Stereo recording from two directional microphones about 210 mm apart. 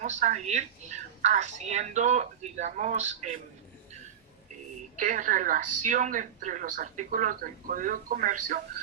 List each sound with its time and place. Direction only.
0.0 s a woman's voice: 35° right (ahead or behind)
4.9 s a woman's voice: 35° right (ahead or behind)